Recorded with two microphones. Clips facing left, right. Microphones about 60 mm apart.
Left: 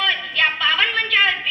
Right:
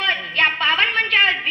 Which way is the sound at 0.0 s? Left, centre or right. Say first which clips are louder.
Right 1 dB; right.